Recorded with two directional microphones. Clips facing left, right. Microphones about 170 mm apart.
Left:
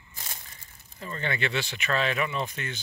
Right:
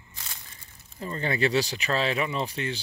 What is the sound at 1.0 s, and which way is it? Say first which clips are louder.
Speech: right 4 dB; 35° right (ahead or behind).